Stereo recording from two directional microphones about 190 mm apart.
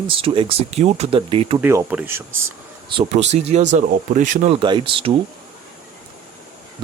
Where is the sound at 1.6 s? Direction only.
10° right (ahead or behind).